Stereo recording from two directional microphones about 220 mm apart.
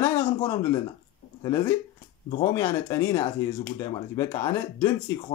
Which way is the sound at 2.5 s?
10° left (ahead or behind).